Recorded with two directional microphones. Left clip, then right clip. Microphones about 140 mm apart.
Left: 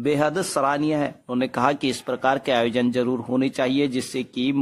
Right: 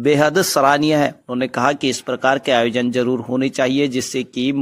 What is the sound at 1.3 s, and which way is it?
Speech, 15° right (ahead or behind).